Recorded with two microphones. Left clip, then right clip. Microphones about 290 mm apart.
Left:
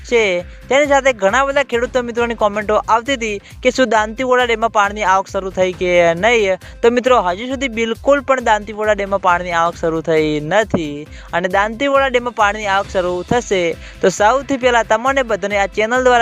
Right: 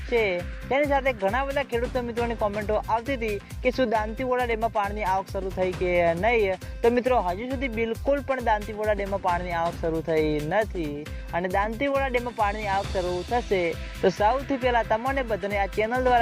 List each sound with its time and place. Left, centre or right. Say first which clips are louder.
0.1 s speech: left 10 dB; left